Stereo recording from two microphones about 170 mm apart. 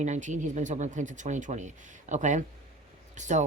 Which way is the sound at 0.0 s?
45° right (ahead or behind).